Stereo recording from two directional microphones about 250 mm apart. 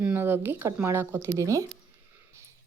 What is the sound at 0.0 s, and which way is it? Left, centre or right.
A woman's voice, centre.